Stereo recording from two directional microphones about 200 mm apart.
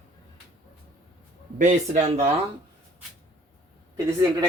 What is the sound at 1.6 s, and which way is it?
Speech, 40° right (ahead or behind).